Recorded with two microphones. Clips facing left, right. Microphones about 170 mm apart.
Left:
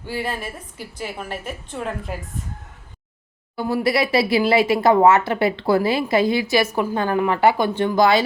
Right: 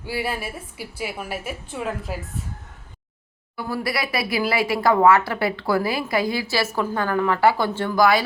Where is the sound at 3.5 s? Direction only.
25° left (ahead or behind).